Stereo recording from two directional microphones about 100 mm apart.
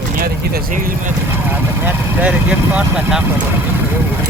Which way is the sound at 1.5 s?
20° right (ahead or behind).